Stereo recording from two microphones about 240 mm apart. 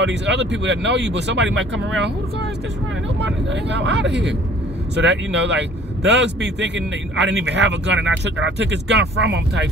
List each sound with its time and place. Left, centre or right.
0.0 s speech: right
3.2 s speech: right